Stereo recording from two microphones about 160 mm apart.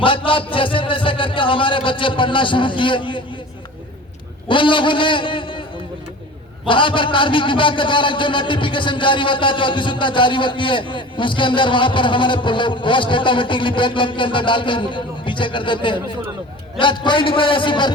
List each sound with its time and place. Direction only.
0.0 s a man's voice: 35° left (ahead or behind)
4.4 s a man's voice: 30° left (ahead or behind)
6.7 s a man's voice: 30° left (ahead or behind)